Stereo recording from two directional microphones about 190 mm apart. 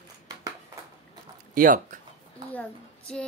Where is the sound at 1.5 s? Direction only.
45° right (ahead or behind).